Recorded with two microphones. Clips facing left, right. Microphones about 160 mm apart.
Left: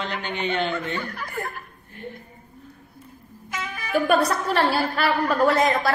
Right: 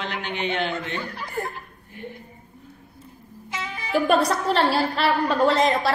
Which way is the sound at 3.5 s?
25° right (ahead or behind).